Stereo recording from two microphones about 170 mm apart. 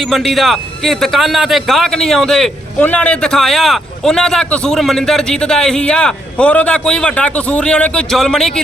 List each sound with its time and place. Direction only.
0.3 s a man's voice: centre (ahead or behind)